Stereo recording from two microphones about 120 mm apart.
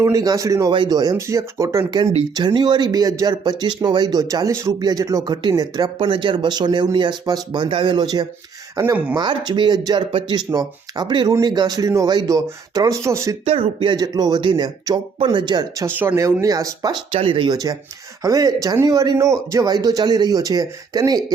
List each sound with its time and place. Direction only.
0.0 s speech: 30° right (ahead or behind)
0.7 s speech: 40° right (ahead or behind)
2.3 s speech: 40° right (ahead or behind)
6.0 s speech: 45° right (ahead or behind); by 13.3 s 25° right (ahead or behind)
13.4 s speech: 50° right (ahead or behind)
14.0 s speech: 35° right (ahead or behind)
15.9 s speech: 20° right (ahead or behind)
17.1 s speech: 50° right (ahead or behind)
17.5 s speech: 30° right (ahead or behind)